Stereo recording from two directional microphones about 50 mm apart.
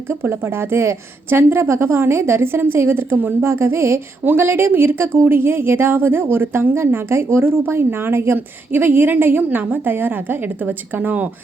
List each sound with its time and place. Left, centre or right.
0.2 s a woman's voice: right
3.4 s a woman's voice: right
4.4 s speech: right
8.4 s a woman's voice: right